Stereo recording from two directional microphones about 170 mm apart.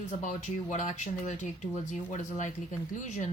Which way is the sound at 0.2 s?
45° left (ahead or behind).